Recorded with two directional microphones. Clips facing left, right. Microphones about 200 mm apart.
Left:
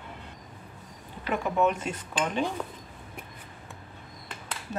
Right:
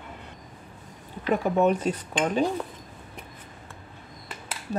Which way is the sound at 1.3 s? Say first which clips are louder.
Right 4 dB; 35° right (ahead or behind).